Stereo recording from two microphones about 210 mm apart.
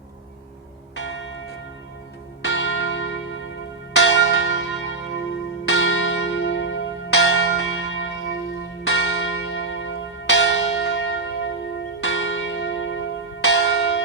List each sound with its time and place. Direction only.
0.9 s church bell: 65° left (ahead or behind)
2.4 s church bell: 60° left (ahead or behind)